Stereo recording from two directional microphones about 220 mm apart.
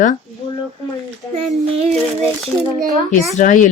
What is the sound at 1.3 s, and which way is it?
Child singing, 30° right (ahead or behind).